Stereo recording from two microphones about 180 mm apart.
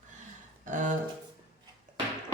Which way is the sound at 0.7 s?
45° right (ahead or behind).